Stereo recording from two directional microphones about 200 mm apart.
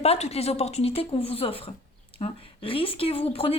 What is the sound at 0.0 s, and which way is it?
A woman's voice, 30° left (ahead or behind).